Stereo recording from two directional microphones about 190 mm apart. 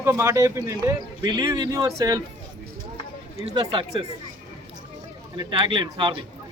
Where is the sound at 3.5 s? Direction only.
25° right (ahead or behind).